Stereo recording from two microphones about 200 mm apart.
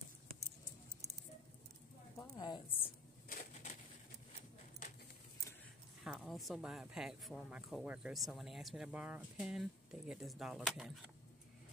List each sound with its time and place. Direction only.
2.1 s a sound: 20° left (ahead or behind)
3.3 s crushing: 45° left (ahead or behind)
6.0 s speech: centre (ahead or behind)